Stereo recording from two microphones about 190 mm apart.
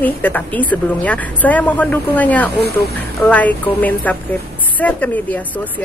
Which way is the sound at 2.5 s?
55° left (ahead or behind).